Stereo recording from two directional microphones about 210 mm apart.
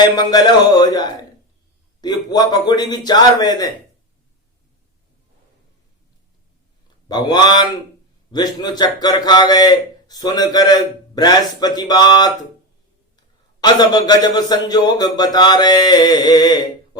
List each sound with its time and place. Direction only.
0.2 s a man's voice: 20° left (ahead or behind)
7.1 s a man's voice: 20° left (ahead or behind)
13.6 s a man's voice: 20° left (ahead or behind)